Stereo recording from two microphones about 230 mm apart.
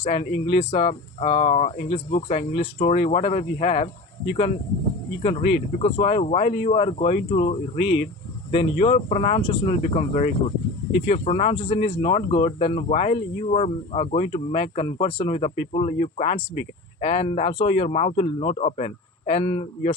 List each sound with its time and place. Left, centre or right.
0.0 s speech: left